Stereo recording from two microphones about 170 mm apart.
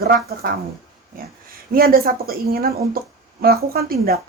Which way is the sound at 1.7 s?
60° right (ahead or behind).